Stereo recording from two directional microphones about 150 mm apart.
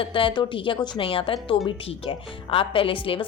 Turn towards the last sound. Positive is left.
turn(degrees=35)  # may be behind; listen again after turning